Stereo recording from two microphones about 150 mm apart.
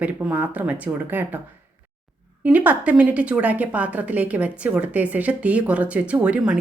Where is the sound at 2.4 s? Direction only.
10° right (ahead or behind).